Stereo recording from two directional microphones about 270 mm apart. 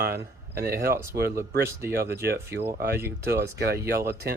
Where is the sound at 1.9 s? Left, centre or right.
Right.